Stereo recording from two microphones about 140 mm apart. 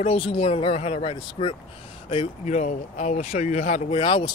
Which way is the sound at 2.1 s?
50° left (ahead or behind).